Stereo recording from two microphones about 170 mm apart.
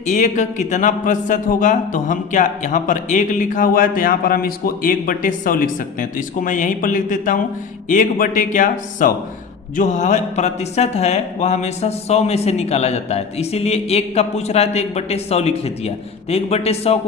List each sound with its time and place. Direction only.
0.0 s a man's voice: 45° left (ahead or behind)